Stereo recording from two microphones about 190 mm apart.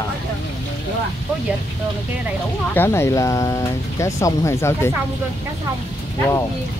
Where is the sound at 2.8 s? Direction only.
15° left (ahead or behind).